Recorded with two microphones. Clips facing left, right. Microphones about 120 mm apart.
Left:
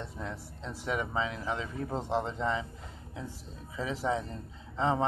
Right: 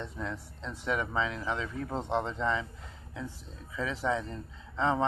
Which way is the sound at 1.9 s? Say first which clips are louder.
Even; 5° left (ahead or behind).